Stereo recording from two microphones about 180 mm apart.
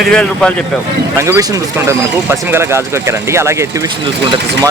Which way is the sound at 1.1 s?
15° right (ahead or behind).